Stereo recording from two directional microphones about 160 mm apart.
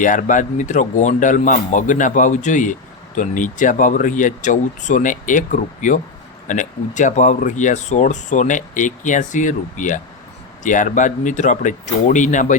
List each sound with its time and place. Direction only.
0.0 s speech: 55° left (ahead or behind)